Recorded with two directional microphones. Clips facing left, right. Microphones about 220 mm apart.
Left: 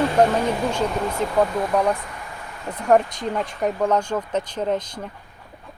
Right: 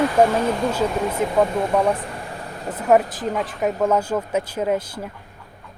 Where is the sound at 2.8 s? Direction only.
5° right (ahead or behind).